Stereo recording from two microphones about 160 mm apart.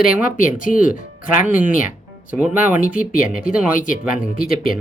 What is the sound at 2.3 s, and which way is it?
Speech, 10° right (ahead or behind).